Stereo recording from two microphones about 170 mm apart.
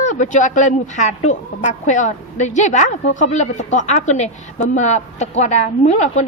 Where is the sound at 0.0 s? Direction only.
45° left (ahead or behind).